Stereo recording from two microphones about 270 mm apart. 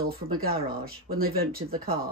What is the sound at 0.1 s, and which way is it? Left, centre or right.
Speech, right.